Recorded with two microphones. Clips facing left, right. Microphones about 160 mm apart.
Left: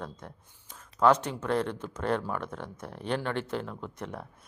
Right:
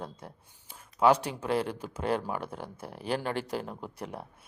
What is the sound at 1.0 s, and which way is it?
Speech, 10° right (ahead or behind).